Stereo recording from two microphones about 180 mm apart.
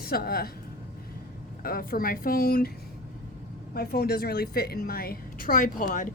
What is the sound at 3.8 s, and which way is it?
A woman's voice, 60° left (ahead or behind).